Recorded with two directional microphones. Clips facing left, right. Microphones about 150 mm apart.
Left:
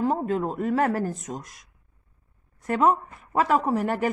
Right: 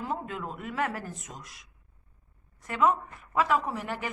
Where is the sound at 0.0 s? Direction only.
40° left (ahead or behind).